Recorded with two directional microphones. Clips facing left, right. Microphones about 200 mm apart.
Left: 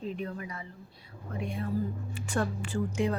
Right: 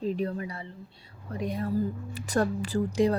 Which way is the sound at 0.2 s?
35° right (ahead or behind).